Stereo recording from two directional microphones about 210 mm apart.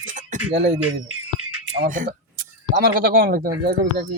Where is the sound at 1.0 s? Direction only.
90° right.